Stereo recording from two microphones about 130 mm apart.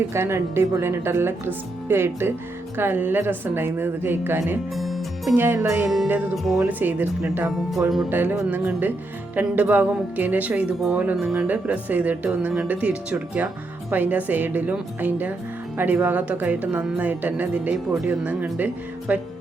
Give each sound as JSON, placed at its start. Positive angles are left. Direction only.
{"t": 0.1, "sound": "speech", "side_deg": -20}
{"t": 4.7, "sound": "music", "side_deg": 0}
{"t": 5.3, "sound": "speech", "side_deg": -15}
{"t": 6.3, "sound": "speech", "side_deg": 0}
{"t": 6.6, "sound": "speech", "side_deg": -15}
{"t": 10.8, "sound": "speech", "side_deg": 0}